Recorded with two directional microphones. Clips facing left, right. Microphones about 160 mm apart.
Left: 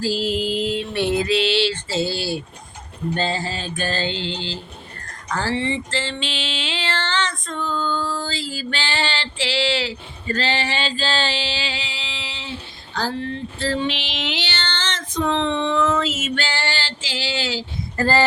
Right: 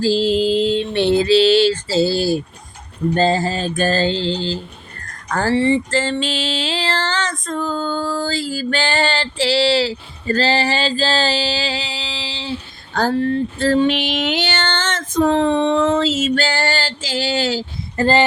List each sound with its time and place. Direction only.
0.0 s music: 30° right (ahead or behind)
3.2 s mantra: 45° right (ahead or behind)
5.3 s a sound: 45° right (ahead or behind); by 12.5 s 30° right (ahead or behind)
12.9 s female singing: 50° right (ahead or behind)
17.9 s speech: 25° right (ahead or behind)